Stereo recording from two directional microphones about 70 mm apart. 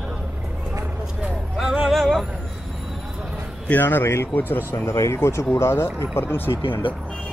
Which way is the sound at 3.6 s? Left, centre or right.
Left.